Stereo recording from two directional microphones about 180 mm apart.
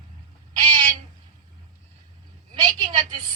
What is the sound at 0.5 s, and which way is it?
Owl, 25° right (ahead or behind).